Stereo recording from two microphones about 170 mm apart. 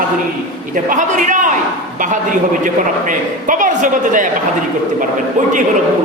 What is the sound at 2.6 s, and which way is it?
A man's voice, 50° right (ahead or behind).